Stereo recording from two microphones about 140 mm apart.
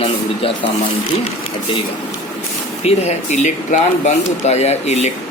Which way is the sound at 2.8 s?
55° left (ahead or behind).